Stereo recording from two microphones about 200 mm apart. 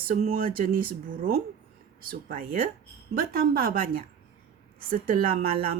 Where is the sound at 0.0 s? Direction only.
45° right (ahead or behind).